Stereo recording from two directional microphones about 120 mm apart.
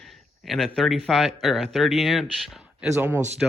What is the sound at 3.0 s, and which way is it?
Speech, 20° right (ahead or behind).